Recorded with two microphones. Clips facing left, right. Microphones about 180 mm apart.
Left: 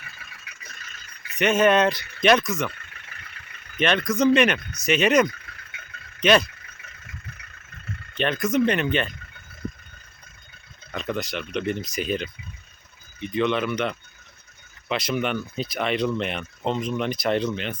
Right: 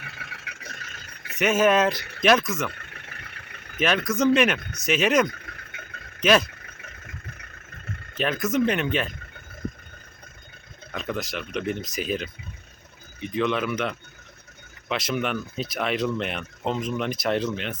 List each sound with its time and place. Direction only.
0.0 s a sound: 65° right (ahead or behind)
1.4 s speech: 5° right (ahead or behind)
2.7 s vehicle: 55° right (ahead or behind)
3.8 s speech: 5° right (ahead or behind)
5.3 s vehicle: 55° right (ahead or behind)
8.1 s speech: 5° right (ahead or behind)
10.9 s speech: centre (ahead or behind)